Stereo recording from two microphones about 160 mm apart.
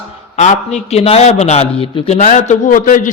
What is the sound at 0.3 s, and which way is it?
A man's voice, 45° left (ahead or behind).